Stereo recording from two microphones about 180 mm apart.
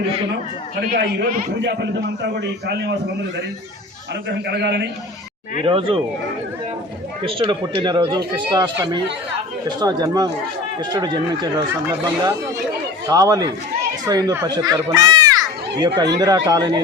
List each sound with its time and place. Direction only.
0.9 s a man's voice: 55° right (ahead or behind)
2.2 s a man's voice: 70° right (ahead or behind)
4.3 s a man's voice: 70° right (ahead or behind)
5.6 s speech: 30° right (ahead or behind)
7.2 s speech: 30° right (ahead or behind)